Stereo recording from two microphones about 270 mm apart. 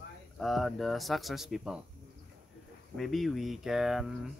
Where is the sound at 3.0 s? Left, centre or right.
Centre.